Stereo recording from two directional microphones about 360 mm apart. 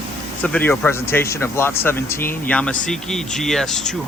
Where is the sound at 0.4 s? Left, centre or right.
Centre.